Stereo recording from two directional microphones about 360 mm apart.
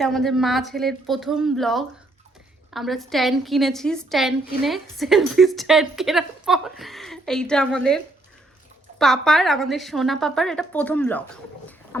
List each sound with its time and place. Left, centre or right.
0.0 s a woman's voice: centre